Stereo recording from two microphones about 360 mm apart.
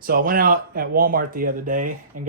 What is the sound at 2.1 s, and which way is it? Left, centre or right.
Speech, right.